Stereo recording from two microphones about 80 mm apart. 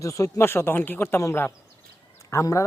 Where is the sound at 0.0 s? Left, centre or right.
Left.